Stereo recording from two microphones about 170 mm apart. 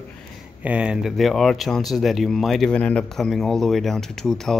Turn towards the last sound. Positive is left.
turn(degrees=0)  # may be behind; listen again after turning